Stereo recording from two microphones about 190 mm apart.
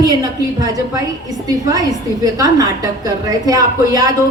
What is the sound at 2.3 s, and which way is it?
A woman's voice, 20° right (ahead or behind).